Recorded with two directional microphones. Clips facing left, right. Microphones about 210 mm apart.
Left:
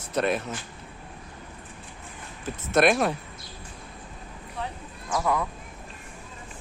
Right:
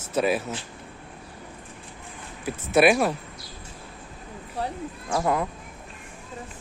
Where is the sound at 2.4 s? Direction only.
5° right (ahead or behind).